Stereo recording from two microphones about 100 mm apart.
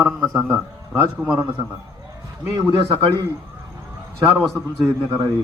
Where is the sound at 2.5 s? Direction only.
30° right (ahead or behind).